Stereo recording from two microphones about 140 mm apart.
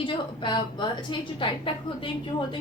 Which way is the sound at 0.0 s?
35° left (ahead or behind).